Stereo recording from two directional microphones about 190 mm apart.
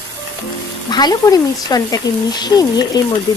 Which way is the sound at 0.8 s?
20° left (ahead or behind).